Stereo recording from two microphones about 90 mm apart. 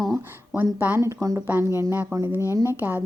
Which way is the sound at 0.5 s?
20° right (ahead or behind).